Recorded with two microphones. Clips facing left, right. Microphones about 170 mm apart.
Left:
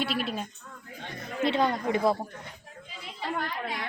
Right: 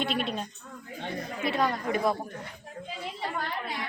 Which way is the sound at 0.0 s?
5° left (ahead or behind).